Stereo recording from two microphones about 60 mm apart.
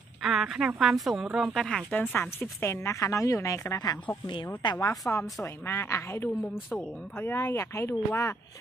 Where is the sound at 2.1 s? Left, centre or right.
Left.